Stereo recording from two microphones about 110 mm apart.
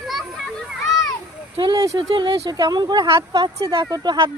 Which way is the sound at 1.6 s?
35° right (ahead or behind).